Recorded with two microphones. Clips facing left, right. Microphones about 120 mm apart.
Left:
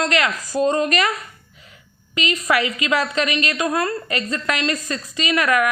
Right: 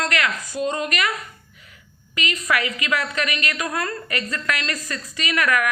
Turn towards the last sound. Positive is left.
turn(degrees=25)  # may be behind; listen again after turning